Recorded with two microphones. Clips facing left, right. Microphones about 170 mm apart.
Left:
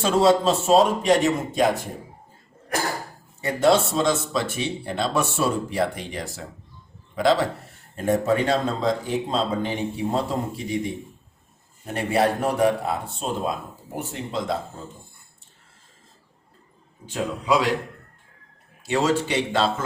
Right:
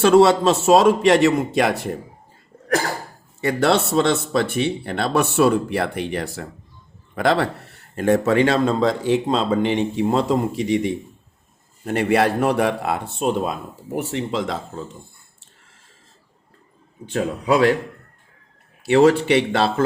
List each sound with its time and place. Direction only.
0.0 s speech: 70° right (ahead or behind)
3.4 s speech: 70° right (ahead or behind)
7.9 s a man's voice: 80° right
17.1 s speech: 60° right (ahead or behind)
18.9 s speech: 65° right (ahead or behind)